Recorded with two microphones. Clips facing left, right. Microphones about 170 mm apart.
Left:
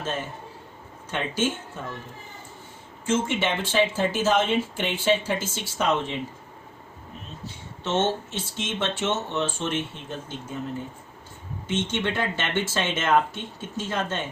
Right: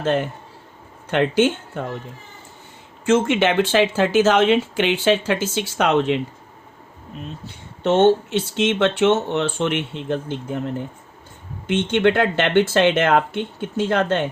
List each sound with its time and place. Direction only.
0.0 s speech: 65° right (ahead or behind)
3.1 s speech: 70° right (ahead or behind)
7.4 s speech: 60° right (ahead or behind)